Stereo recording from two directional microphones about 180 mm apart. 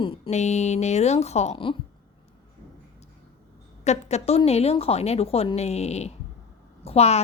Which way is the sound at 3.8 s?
40° left (ahead or behind).